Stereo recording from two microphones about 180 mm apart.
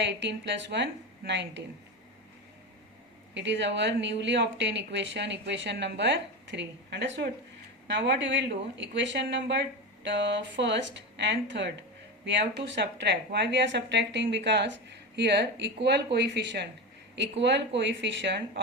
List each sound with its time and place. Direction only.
0.0 s speech: 75° right (ahead or behind)
3.3 s speech: 80° right
17.7 s speech: 80° right